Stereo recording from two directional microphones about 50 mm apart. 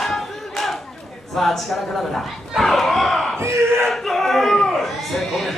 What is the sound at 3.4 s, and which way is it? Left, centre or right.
Battle cry, right.